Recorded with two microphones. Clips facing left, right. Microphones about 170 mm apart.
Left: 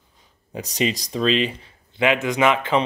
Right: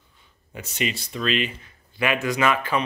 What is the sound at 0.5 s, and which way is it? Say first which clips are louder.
Speech: left 5 dB; 35° left (ahead or behind).